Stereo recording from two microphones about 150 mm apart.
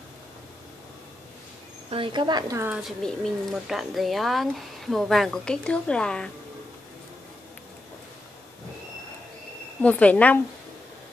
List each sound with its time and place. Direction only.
1.9 s speech: 35° right (ahead or behind); by 2.8 s 15° right (ahead or behind)
2.8 s speech: centre (ahead or behind)
9.8 s speech: 10° left (ahead or behind)